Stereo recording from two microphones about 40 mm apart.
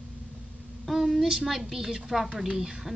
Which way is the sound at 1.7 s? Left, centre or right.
Centre.